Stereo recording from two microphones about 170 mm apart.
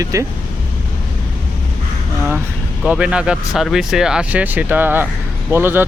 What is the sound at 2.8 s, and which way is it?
Speech, 5° right (ahead or behind).